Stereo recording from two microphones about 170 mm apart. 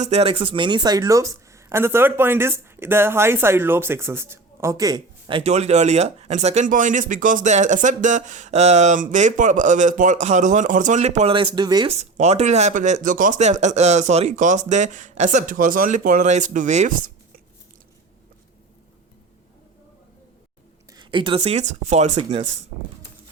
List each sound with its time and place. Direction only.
0.0 s speech: 40° right (ahead or behind)
11.9 s speech: 40° right (ahead or behind)
20.9 s speech: 25° right (ahead or behind)